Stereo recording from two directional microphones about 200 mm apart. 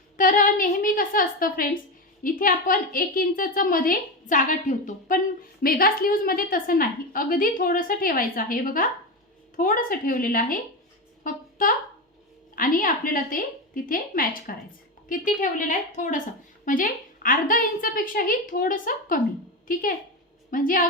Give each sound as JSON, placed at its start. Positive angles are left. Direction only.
{"t": 0.2, "sound": "a woman's voice", "side_deg": 40}
{"t": 11.2, "sound": "a sound", "side_deg": 45}
{"t": 12.5, "sound": "a woman's voice", "side_deg": 45}